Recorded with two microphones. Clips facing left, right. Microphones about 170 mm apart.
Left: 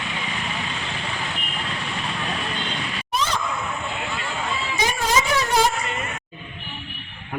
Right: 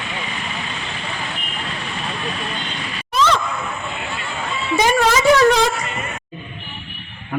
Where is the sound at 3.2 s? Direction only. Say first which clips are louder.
Right 8 dB; 90° right.